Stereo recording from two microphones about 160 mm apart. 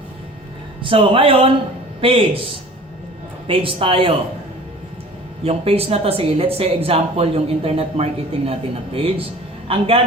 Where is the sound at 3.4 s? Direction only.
35° right (ahead or behind).